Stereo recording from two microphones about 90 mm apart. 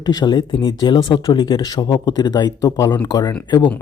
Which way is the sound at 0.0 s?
50° left (ahead or behind).